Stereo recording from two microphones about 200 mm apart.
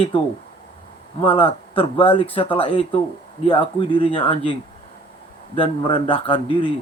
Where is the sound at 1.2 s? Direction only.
25° left (ahead or behind).